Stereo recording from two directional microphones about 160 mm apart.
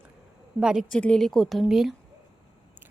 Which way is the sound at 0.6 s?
5° right (ahead or behind).